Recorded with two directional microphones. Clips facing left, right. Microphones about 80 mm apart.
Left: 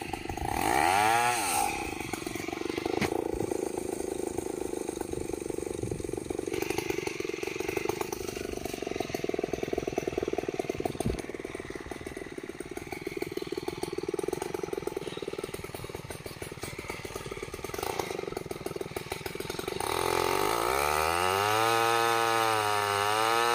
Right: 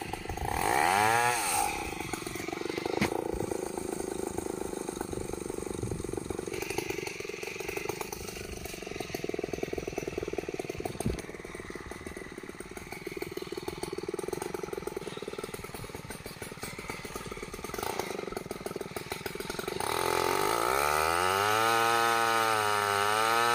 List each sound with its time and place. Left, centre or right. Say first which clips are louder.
0.6 s chainsaw: left 1 dB; centre
2.6 s vehicle: left 1 dB; centre
6.6 s chainsaw: left 3 dB; centre
19.8 s vehicle: left 1 dB; centre